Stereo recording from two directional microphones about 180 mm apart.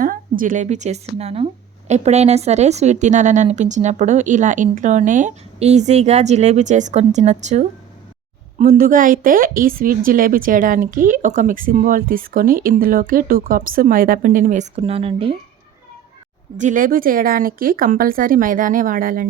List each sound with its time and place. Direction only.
0.0 s a woman's voice: 50° right (ahead or behind); by 15.4 s 30° right (ahead or behind)
16.6 s speech: 45° right (ahead or behind)